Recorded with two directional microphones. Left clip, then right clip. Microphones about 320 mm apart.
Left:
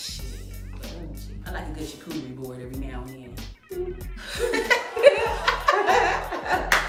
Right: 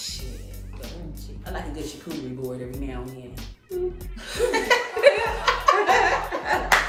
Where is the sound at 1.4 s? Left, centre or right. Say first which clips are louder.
Right 2 dB; centre.